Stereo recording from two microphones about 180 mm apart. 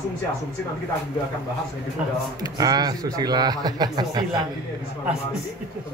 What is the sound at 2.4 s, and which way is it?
Speech, 20° right (ahead or behind).